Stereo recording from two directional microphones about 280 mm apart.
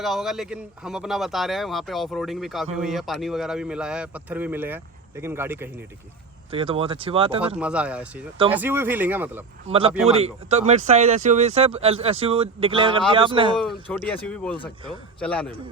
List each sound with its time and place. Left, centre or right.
0.0 s a man's voice: centre
6.5 s speech: centre
7.4 s a man's voice: centre
9.6 s speech: centre
13.6 s a man's voice: centre